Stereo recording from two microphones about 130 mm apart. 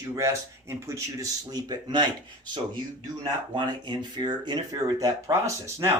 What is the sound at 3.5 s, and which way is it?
Speech, 35° right (ahead or behind).